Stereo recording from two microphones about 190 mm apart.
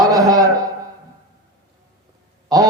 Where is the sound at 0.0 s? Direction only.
20° right (ahead or behind).